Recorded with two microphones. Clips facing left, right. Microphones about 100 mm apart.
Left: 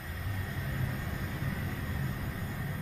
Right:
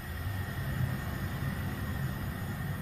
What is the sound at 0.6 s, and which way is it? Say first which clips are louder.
Vehicle: right 1 dB; 15° right (ahead or behind).